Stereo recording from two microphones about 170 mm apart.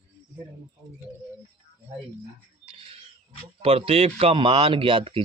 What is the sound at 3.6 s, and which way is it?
Speech, 35° right (ahead or behind).